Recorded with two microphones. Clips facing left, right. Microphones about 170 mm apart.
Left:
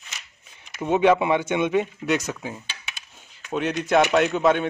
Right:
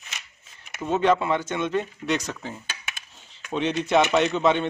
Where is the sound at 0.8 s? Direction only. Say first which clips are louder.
Left 3 dB; 10° left (ahead or behind).